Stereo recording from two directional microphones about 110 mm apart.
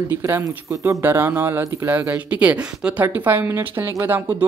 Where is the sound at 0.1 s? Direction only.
25° right (ahead or behind).